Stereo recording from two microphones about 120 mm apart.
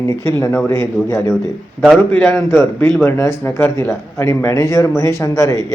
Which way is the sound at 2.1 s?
15° left (ahead or behind).